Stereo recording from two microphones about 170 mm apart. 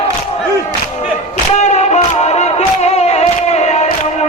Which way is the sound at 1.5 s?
40° left (ahead or behind).